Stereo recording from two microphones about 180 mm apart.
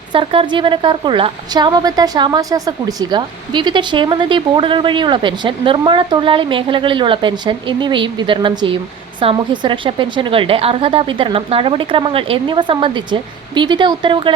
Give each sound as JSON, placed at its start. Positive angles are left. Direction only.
{"t": 0.1, "sound": "a woman's voice", "side_deg": -30}